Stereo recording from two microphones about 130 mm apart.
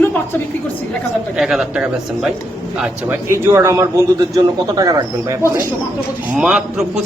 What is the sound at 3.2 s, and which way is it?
A man's voice, 20° right (ahead or behind).